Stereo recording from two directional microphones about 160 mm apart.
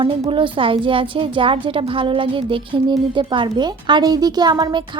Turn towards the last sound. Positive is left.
turn(degrees=-25)  # may be behind; listen again after turning